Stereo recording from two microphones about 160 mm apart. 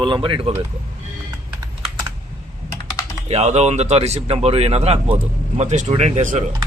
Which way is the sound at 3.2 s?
45° right (ahead or behind).